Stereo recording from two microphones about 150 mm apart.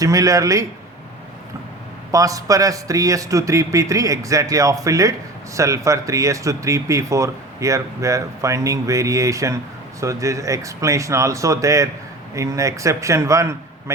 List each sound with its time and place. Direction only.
0.0 s speech: 20° right (ahead or behind)
2.1 s speech: 20° right (ahead or behind)